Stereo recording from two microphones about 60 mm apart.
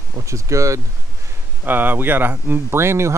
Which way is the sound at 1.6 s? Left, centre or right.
Right.